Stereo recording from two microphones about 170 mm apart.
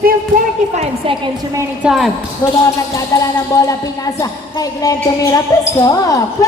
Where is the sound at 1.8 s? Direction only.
5° right (ahead or behind).